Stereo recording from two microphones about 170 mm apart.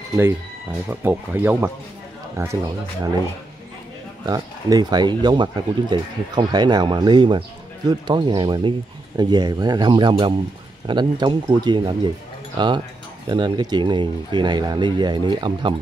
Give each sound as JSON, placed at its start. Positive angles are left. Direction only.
{"t": 0.8, "sound": "speech", "side_deg": -10}
{"t": 4.3, "sound": "speech", "side_deg": -20}